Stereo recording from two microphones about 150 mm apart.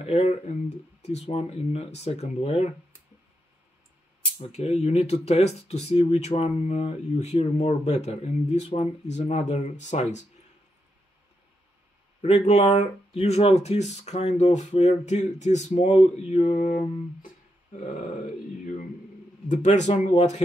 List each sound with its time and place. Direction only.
0.0 s speech: 45° left (ahead or behind)
4.4 s speech: 45° left (ahead or behind)
12.2 s speech: 50° left (ahead or behind)
16.5 s a sound: 70° left (ahead or behind)
19.5 s speech: 50° left (ahead or behind)